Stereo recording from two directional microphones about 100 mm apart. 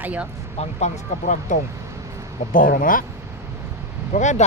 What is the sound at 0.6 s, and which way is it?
Speech, 90° left.